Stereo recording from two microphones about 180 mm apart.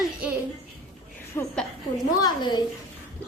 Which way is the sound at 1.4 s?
15° left (ahead or behind).